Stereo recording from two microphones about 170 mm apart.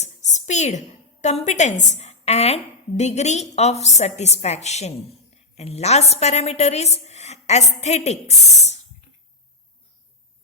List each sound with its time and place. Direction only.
0.0 s a woman's voice: 45° left (ahead or behind)